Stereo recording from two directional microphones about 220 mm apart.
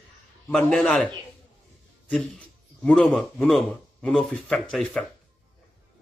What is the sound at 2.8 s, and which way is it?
Speech, 5° left (ahead or behind).